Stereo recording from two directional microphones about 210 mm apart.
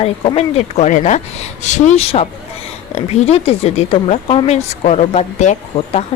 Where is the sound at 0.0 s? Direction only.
30° left (ahead or behind).